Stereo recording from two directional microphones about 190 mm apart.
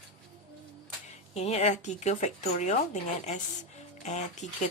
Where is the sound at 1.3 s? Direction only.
35° left (ahead or behind).